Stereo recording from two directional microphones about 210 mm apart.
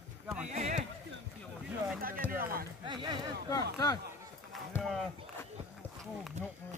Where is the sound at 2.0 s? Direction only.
45° right (ahead or behind).